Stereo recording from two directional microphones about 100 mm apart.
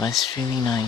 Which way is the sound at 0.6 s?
35° left (ahead or behind).